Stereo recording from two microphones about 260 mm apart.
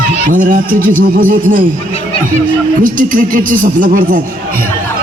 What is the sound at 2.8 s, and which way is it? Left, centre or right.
Speech, right.